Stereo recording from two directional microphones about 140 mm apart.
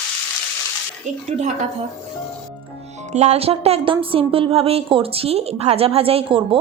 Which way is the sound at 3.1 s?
50° right (ahead or behind).